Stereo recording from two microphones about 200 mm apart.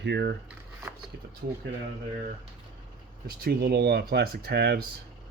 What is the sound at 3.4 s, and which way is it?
Speech, 50° right (ahead or behind).